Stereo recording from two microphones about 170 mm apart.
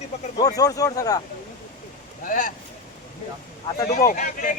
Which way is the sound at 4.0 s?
55° left (ahead or behind).